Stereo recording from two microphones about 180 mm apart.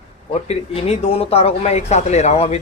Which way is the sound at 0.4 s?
35° left (ahead or behind).